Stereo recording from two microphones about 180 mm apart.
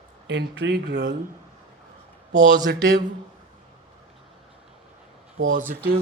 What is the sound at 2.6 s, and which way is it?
Speech, 60° right (ahead or behind).